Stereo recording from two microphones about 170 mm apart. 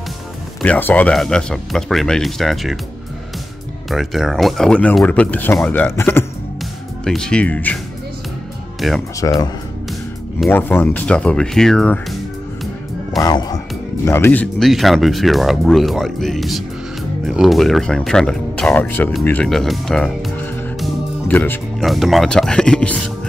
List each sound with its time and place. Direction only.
0.6 s speech: 10° left (ahead or behind)
3.9 s speech: centre (ahead or behind)
8.8 s speech: centre (ahead or behind)
9.2 s speech: 20° left (ahead or behind)
10.5 s speech: 10° left (ahead or behind)
13.2 s speech: 25° left (ahead or behind)
19.2 s music: 5° left (ahead or behind)
21.8 s speech: centre (ahead or behind)